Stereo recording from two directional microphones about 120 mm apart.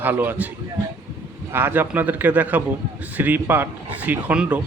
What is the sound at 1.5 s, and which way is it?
Speech, 15° right (ahead or behind).